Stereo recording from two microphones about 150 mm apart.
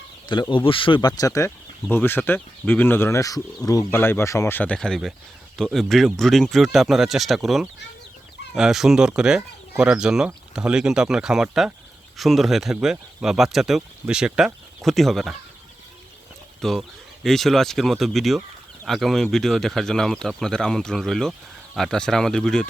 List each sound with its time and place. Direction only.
0.3 s speech: 30° left (ahead or behind); by 15.4 s centre (ahead or behind)
16.6 s speech: centre (ahead or behind)